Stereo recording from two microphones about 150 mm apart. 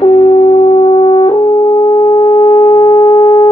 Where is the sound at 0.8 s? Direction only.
30° left (ahead or behind).